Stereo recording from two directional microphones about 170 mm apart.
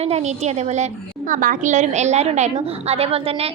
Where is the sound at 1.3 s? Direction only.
55° right (ahead or behind).